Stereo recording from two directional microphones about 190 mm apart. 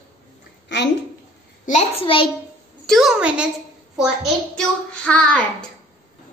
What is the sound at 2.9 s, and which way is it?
Child singing, centre (ahead or behind).